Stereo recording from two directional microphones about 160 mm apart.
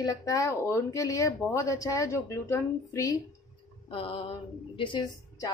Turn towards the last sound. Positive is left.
turn(degrees=30)  # may be behind; listen again after turning